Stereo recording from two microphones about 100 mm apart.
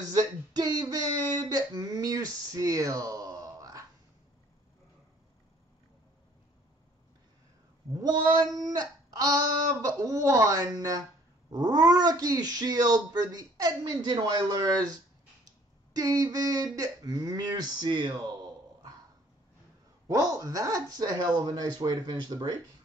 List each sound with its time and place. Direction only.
0.1 s a sound: 40° right (ahead or behind)
8.0 s cat: 40° right (ahead or behind)
8.5 s speech: 40° right (ahead or behind)
20.1 s speech: 35° right (ahead or behind)